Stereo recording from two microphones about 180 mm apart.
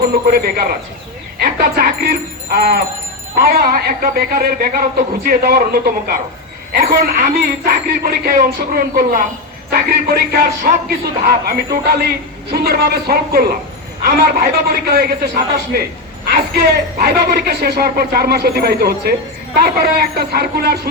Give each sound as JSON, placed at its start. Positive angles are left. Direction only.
{"t": 0.0, "sound": "a man's voice", "side_deg": -55}
{"t": 10.3, "sound": "a man's voice", "side_deg": -60}
{"t": 17.0, "sound": "a man's voice", "side_deg": -60}